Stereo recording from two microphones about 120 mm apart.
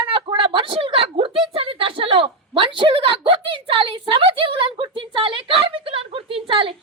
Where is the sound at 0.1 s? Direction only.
45° right (ahead or behind).